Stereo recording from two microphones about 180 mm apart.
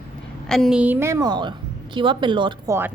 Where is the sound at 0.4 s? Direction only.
Centre (ahead or behind); by 2.7 s 25° right (ahead or behind).